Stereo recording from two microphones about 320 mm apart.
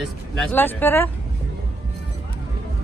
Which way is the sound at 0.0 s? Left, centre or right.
Centre.